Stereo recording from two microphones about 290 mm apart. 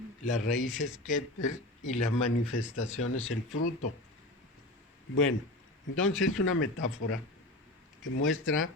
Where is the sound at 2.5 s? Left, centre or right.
Left.